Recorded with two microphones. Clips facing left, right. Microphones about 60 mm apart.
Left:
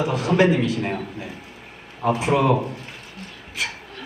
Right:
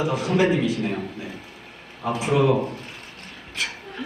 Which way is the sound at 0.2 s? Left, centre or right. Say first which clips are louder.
Left 4 dB; left.